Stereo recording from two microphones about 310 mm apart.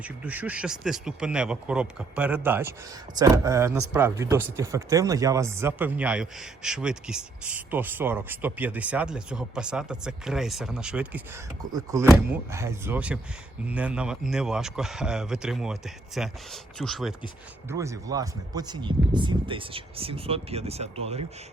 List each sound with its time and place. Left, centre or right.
0.0 s speech: centre